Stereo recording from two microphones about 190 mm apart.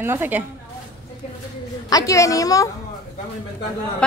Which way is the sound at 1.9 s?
15° left (ahead or behind).